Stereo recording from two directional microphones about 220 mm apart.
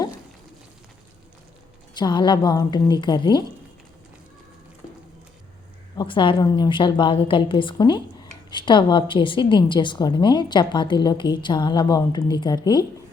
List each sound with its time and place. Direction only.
2.0 s a woman's voice: 20° left (ahead or behind)
6.0 s a woman's voice: 20° left (ahead or behind)